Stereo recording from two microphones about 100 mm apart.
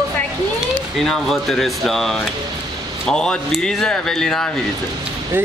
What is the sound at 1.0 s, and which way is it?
Speech, 5° left (ahead or behind).